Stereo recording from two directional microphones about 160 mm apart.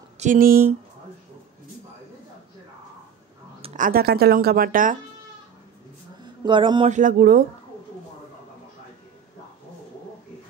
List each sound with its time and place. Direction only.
0.2 s speech: 60° right (ahead or behind)
3.7 s speech: 60° right (ahead or behind)
6.2 s speech: 30° right (ahead or behind)
6.9 s speech: 55° right (ahead or behind)